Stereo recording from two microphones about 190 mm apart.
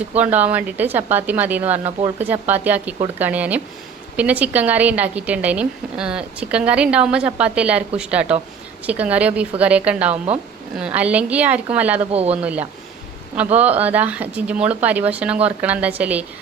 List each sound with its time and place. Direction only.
0.2 s a woman's voice: 10° right (ahead or behind)
12.1 s speech: 30° right (ahead or behind)
12.4 s a woman's voice: 5° right (ahead or behind)